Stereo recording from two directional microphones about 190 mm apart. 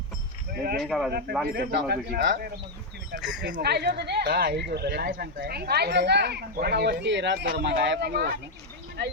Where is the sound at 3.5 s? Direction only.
60° right (ahead or behind).